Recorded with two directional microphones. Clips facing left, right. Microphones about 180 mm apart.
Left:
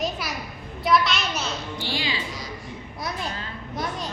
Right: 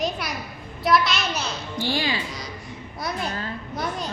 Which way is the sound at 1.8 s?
45° right (ahead or behind).